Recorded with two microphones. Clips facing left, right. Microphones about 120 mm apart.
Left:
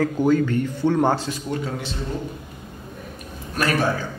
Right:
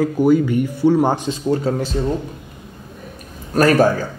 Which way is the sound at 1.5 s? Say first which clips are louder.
Right 10 dB; 40° right (ahead or behind).